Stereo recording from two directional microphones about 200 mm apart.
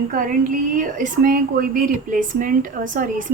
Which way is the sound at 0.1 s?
40° right (ahead or behind).